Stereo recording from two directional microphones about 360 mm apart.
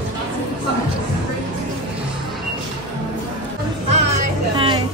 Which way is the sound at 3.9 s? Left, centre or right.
Centre.